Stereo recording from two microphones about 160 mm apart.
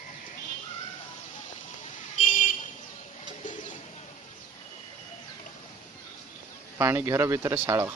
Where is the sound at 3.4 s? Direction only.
50° left (ahead or behind).